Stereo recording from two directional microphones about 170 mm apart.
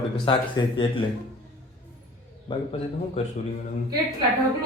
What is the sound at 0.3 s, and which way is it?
Speech, 30° left (ahead or behind).